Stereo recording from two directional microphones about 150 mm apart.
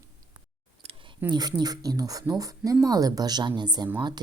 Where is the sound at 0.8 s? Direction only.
40° right (ahead or behind).